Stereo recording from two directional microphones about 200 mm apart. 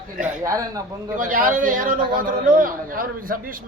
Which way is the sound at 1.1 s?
40° right (ahead or behind).